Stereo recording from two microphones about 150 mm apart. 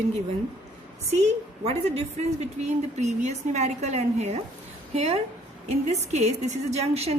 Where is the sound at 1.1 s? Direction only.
45° right (ahead or behind).